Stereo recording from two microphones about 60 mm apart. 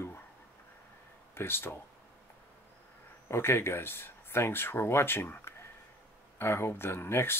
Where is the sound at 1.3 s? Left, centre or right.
Left.